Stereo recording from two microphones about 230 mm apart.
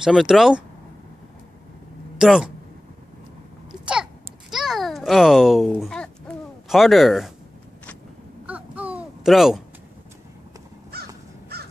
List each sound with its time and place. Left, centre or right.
0.0 s speech: centre
2.1 s speech: centre
3.8 s babbling: centre
8.5 s a sound: centre
10.9 s crow: right